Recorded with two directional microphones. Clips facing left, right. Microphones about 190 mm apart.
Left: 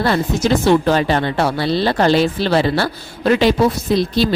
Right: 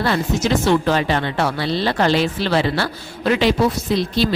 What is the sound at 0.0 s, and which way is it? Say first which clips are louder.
Speech: left 2 dB; 35° left (ahead or behind).